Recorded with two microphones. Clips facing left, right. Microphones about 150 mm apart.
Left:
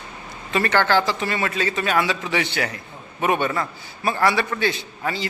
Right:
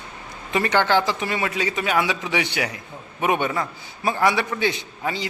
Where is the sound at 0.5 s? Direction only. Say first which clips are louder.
Even; 15° right (ahead or behind).